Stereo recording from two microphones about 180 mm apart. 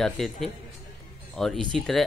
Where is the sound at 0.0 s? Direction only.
Centre (ahead or behind).